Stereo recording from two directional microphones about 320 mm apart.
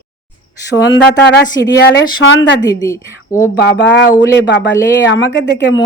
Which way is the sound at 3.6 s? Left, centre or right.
Left.